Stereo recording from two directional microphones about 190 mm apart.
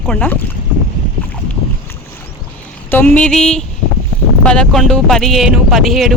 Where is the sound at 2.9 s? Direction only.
5° left (ahead or behind).